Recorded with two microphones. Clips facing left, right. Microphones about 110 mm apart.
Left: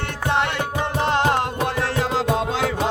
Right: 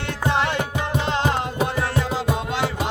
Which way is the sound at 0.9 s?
55° left (ahead or behind).